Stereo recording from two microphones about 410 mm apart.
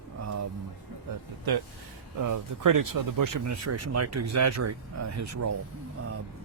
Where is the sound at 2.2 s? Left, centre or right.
Right.